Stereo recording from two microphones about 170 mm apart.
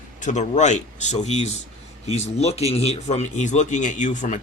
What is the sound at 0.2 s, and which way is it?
Speech, 45° left (ahead or behind).